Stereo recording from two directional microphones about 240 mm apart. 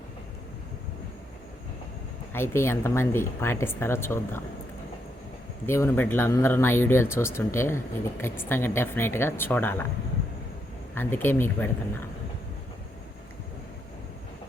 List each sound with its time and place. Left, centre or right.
2.3 s speech: centre
5.6 s speech: centre
10.9 s speech: centre